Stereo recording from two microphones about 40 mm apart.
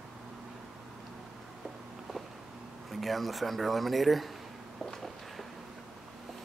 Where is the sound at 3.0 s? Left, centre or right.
Centre.